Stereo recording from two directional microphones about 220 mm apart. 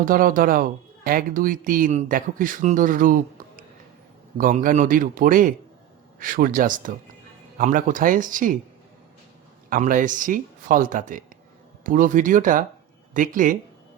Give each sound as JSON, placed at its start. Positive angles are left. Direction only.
{"t": 0.0, "sound": "speech", "side_deg": -40}
{"t": 9.6, "sound": "speech", "side_deg": -35}